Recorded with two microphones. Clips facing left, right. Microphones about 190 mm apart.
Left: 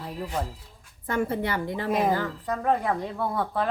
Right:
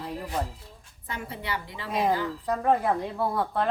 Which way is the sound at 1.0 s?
50° left (ahead or behind).